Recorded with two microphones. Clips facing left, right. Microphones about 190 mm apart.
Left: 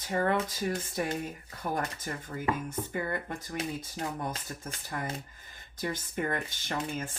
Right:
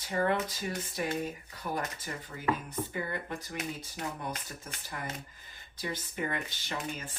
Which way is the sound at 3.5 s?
30° left (ahead or behind).